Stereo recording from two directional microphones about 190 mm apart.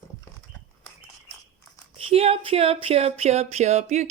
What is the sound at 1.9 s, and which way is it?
Speech, 30° right (ahead or behind).